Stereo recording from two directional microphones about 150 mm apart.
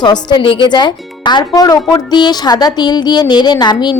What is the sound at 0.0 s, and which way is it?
Speech, 30° left (ahead or behind).